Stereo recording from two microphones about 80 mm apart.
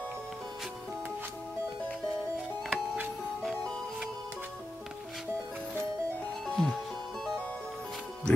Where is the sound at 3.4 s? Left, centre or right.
Centre.